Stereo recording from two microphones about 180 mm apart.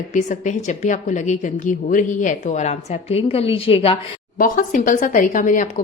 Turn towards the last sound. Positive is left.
turn(degrees=45)  # may be behind; listen again after turning